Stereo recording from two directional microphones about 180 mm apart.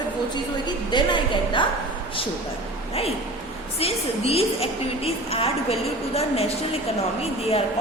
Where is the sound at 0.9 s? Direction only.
25° left (ahead or behind).